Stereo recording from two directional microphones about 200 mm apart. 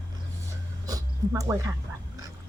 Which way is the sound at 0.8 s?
15° right (ahead or behind).